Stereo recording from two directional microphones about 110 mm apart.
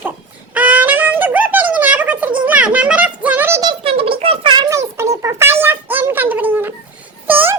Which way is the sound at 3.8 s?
60° right (ahead or behind).